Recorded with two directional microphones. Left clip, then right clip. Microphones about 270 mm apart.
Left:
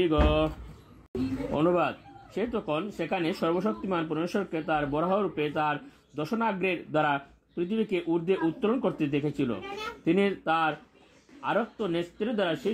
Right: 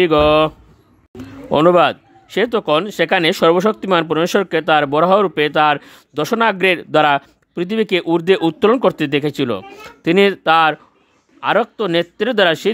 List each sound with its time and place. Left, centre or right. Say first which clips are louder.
0.0 s speech: right 13 dB; right
1.5 s speech: right 15 dB; right